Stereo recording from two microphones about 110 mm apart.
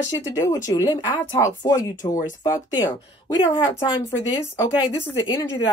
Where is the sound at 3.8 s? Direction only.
45° left (ahead or behind).